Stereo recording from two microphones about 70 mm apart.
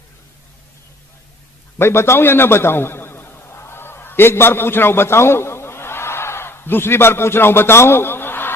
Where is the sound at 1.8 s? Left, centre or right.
Left.